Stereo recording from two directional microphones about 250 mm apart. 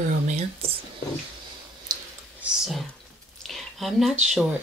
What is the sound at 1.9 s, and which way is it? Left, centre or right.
Clicking, centre.